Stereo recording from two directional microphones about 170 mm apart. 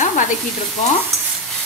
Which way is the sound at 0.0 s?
45° left (ahead or behind).